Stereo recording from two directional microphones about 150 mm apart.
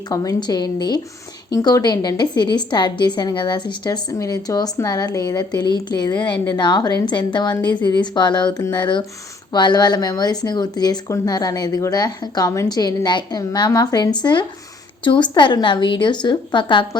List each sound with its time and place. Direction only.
0.1 s a woman's voice: 25° left (ahead or behind)